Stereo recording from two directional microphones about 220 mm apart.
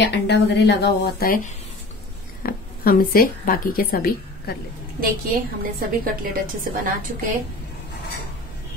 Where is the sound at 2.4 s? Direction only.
40° left (ahead or behind).